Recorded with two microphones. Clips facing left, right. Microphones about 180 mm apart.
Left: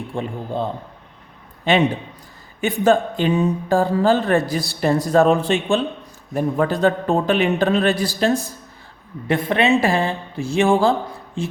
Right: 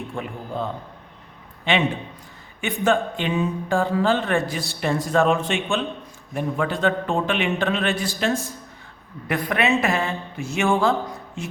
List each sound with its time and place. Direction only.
0.1 s speech: 30° left (ahead or behind)